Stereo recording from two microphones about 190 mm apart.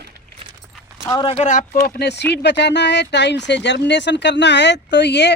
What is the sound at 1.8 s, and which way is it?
Speech, 55° left (ahead or behind).